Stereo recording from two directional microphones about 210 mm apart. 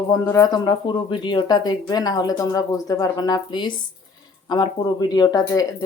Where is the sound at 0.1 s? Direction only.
15° left (ahead or behind).